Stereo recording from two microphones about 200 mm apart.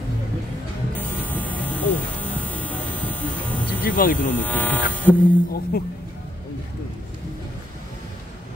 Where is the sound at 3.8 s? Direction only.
45° left (ahead or behind).